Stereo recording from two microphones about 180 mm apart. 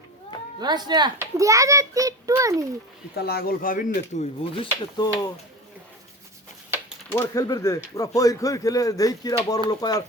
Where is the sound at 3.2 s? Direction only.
60° left (ahead or behind).